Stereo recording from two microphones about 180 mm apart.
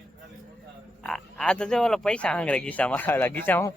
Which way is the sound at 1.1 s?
5° left (ahead or behind).